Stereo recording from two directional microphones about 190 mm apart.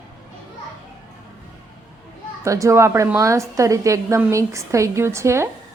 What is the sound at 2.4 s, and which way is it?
A woman's voice, 15° right (ahead or behind).